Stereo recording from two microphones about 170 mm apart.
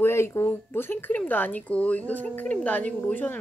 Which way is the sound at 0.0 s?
15° left (ahead or behind).